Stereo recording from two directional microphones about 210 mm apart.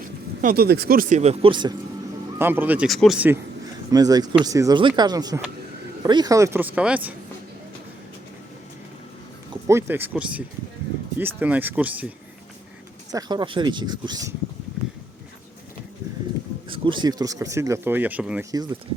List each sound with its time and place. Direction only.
0.4 s speech: 45° right (ahead or behind); by 1.7 s 25° right (ahead or behind)
2.4 s speech: 10° right (ahead or behind)
3.9 s speech: 20° right (ahead or behind)
9.6 s speech: 10° right (ahead or behind)
13.1 s speech: 20° right (ahead or behind)
16.7 s speech: 25° right (ahead or behind); by 18.4 s 5° right (ahead or behind)
18.5 s speech: 20° right (ahead or behind)